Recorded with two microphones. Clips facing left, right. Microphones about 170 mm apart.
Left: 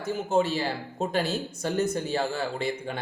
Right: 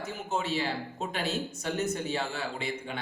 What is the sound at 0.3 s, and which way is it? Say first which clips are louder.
Speech: left 5 dB; 40° left (ahead or behind).